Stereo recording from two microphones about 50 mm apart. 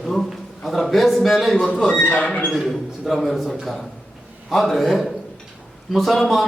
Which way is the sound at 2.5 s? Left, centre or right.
Centre.